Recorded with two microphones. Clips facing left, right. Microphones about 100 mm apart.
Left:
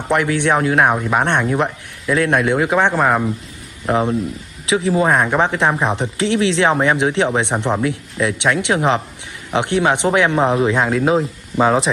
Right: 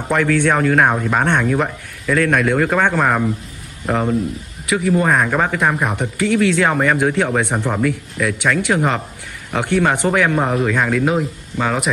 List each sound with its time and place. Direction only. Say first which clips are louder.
0.1 s a man's voice: even; 15° left (ahead or behind)
4.6 s speech: left 1 dB; 25° left (ahead or behind)